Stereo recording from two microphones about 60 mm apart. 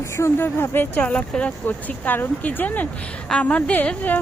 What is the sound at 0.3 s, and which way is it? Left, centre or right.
Speech, left.